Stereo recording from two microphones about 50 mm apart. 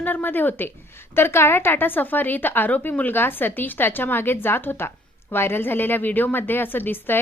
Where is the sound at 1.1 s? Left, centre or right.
Left.